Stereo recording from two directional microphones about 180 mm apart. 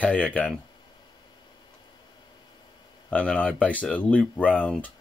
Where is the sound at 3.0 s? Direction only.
10° left (ahead or behind).